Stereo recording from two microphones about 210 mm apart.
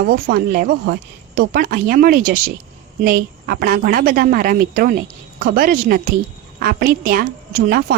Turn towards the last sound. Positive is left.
turn(degrees=-45)  # may be behind; listen again after turning